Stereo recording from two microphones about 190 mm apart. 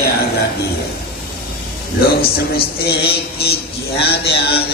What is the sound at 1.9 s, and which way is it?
A man's voice, 55° left (ahead or behind).